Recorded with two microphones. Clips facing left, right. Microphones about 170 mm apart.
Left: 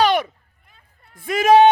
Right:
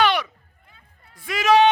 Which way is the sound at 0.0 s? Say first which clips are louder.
Left 3 dB; 45° left (ahead or behind).